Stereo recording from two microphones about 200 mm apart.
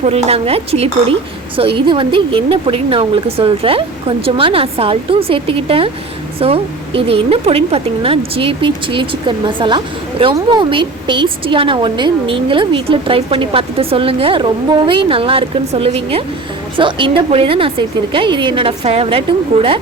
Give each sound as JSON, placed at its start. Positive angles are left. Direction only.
{"t": 0.0, "sound": "a woman's voice", "side_deg": -30}